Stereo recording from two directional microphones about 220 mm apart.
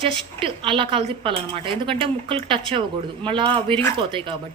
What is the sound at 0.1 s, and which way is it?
A woman's voice, 25° right (ahead or behind).